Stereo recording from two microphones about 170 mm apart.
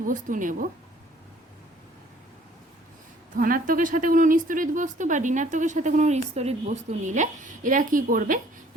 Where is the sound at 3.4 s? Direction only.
55° right (ahead or behind).